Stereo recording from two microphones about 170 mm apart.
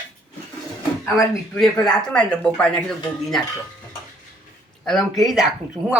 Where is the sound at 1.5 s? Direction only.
5° left (ahead or behind).